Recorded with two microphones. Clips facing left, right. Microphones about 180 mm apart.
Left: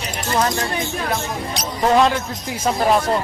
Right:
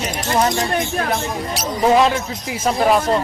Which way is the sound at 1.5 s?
5° right (ahead or behind).